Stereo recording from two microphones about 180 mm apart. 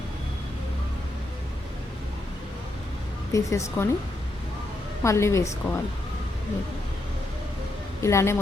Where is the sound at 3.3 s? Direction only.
15° left (ahead or behind).